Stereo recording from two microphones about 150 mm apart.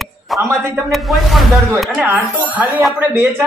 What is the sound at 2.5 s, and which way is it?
Speech, 10° right (ahead or behind).